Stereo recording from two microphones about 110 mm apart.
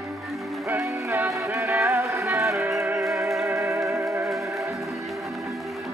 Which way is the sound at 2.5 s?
Centre (ahead or behind).